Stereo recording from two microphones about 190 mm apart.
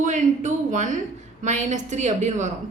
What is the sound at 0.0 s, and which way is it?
A woman's voice, 40° right (ahead or behind).